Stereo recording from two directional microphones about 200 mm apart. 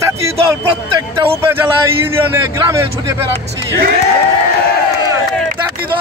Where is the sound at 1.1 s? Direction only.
10° right (ahead or behind).